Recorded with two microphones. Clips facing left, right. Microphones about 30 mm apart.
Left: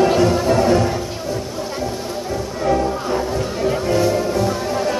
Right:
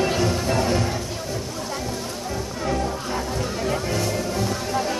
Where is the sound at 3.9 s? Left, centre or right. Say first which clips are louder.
Left 8 dB; centre.